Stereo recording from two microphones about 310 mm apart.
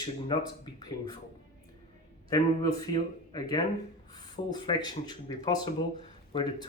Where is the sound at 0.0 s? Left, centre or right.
Centre.